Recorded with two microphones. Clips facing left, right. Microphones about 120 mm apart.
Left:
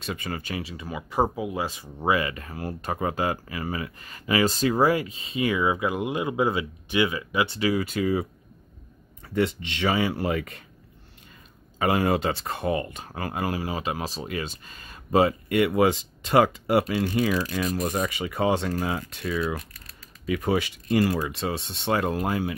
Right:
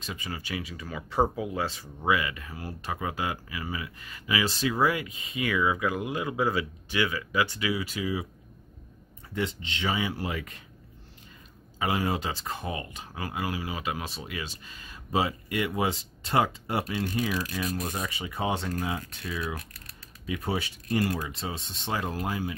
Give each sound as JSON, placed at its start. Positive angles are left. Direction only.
{"t": 0.0, "sound": "speech", "side_deg": 60}
{"t": 0.6, "sound": "speech", "side_deg": 30}
{"t": 0.8, "sound": "speech", "side_deg": 15}
{"t": 2.0, "sound": "speech", "side_deg": 40}
{"t": 7.6, "sound": "speech", "side_deg": 45}
{"t": 9.3, "sound": "speech", "side_deg": 65}
{"t": 11.8, "sound": "speech", "side_deg": 60}
{"t": 18.1, "sound": "speech", "side_deg": 70}
{"t": 20.2, "sound": "speech", "side_deg": 90}